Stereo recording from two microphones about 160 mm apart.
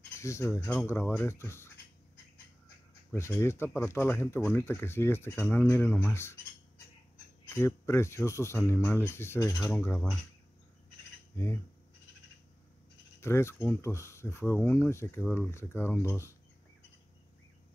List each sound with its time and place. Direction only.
0.2 s speech: 15° left (ahead or behind)
3.1 s speech: 15° left (ahead or behind)
7.5 s speech: 15° left (ahead or behind)
11.3 s speech: 15° left (ahead or behind)
13.2 s speech: 15° left (ahead or behind)